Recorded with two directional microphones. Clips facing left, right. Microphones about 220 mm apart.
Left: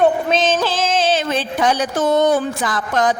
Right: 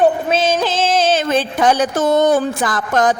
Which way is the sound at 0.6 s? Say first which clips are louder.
Right 2 dB; 25° right (ahead or behind).